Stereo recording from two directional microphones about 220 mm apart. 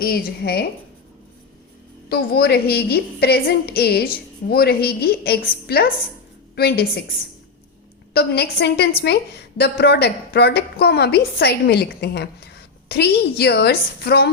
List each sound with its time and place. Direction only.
0.0 s a woman's voice: 45° left (ahead or behind)
2.0 s a woman's voice: 45° left (ahead or behind)
8.1 s a woman's voice: 45° left (ahead or behind)